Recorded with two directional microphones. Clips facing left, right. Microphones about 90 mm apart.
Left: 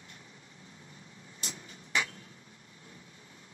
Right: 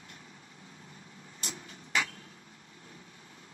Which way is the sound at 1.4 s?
35° right (ahead or behind).